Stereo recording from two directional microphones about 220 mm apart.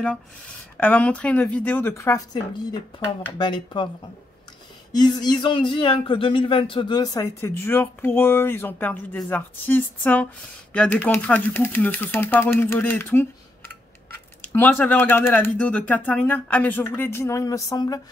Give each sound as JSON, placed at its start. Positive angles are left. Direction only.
{"t": 0.7, "sound": "speech", "side_deg": 5}
{"t": 4.9, "sound": "speech", "side_deg": 20}
{"t": 14.5, "sound": "speech", "side_deg": 10}